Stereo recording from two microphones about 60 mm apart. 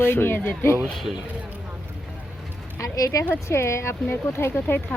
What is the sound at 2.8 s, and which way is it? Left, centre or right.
Speech, left.